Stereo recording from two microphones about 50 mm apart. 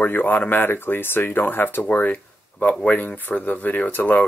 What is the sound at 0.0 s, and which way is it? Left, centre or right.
Speech, left.